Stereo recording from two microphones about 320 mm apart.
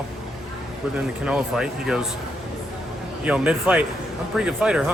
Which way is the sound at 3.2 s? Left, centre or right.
Centre.